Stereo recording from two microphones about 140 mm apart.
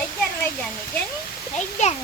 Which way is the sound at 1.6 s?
55° left (ahead or behind).